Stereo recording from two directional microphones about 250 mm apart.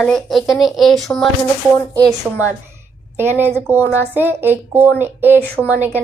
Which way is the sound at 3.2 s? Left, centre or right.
Centre.